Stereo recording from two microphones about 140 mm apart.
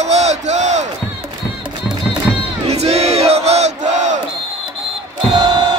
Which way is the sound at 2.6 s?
50° right (ahead or behind).